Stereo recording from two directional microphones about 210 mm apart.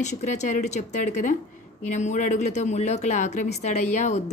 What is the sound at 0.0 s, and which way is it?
A woman's voice, 35° left (ahead or behind).